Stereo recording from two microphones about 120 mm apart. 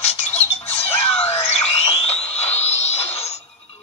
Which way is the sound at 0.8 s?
55° left (ahead or behind).